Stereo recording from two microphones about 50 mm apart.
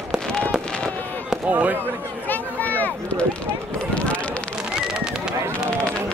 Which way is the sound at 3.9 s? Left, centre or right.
Left.